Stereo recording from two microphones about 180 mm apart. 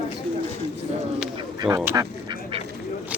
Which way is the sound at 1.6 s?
20° right (ahead or behind).